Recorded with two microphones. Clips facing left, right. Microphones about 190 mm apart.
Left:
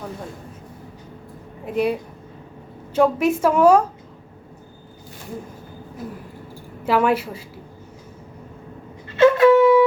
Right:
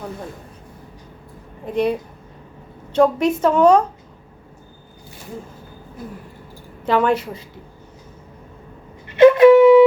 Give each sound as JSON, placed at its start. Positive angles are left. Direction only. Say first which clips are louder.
{"t": 1.6, "sound": "a woman's voice", "louder": "right 1 dB", "side_deg": 5}
{"t": 6.8, "sound": "a woman's voice", "louder": "right 1 dB", "side_deg": 5}
{"t": 9.0, "sound": "wind instrument", "louder": "right 4 dB", "side_deg": -15}